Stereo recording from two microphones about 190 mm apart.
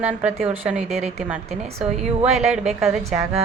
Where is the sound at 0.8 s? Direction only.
35° right (ahead or behind).